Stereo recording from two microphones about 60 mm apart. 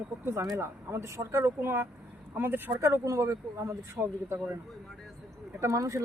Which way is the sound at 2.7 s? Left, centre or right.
Right.